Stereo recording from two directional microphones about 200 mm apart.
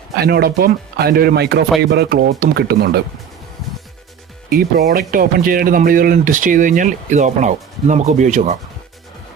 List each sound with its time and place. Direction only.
0.2 s speech: 50° right (ahead or behind)
4.9 s speech: 50° right (ahead or behind)